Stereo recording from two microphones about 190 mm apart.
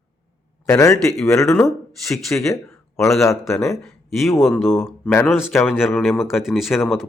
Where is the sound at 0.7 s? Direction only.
15° left (ahead or behind).